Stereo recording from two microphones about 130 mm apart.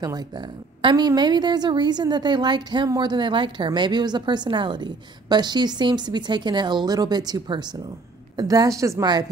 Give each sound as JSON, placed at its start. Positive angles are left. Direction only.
{"t": 0.0, "sound": "a woman's voice", "side_deg": -30}